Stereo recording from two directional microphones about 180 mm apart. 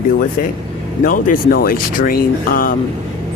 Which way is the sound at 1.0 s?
50° left (ahead or behind).